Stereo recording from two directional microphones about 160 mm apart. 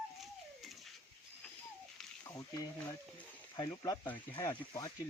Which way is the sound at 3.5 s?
25° left (ahead or behind).